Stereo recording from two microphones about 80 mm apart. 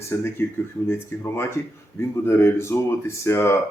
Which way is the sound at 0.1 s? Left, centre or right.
Left.